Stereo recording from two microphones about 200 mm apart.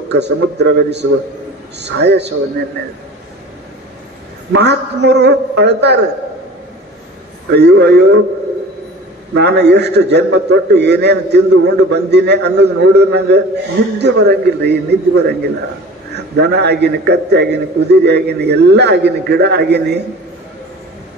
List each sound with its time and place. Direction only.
0.1 s a man's voice: 55° right (ahead or behind)
4.5 s a man's voice: 60° right (ahead or behind)
7.5 s a man's voice: 55° right (ahead or behind)
9.3 s a man's voice: 55° right (ahead or behind)